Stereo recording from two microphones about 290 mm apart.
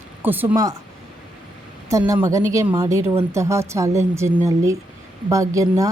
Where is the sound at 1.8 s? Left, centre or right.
Centre.